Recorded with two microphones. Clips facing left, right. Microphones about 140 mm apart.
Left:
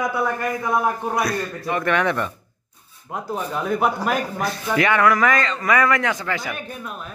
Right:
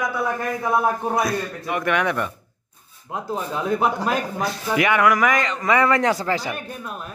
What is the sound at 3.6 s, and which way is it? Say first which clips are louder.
Speech: even; 25° right (ahead or behind).